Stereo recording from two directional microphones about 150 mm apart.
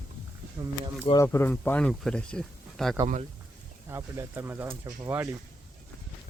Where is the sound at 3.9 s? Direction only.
15° right (ahead or behind).